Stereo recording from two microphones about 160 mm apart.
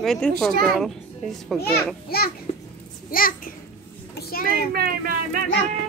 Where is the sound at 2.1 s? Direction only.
70° left (ahead or behind).